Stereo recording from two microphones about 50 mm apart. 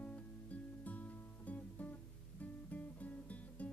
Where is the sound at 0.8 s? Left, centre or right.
Left.